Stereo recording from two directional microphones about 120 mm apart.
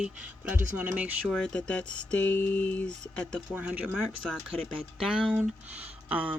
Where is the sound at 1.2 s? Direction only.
5° left (ahead or behind).